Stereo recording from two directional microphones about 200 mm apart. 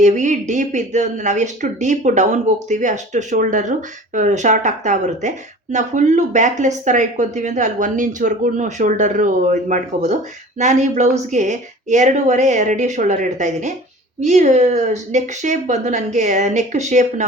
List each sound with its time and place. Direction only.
0.0 s speech: 35° right (ahead or behind)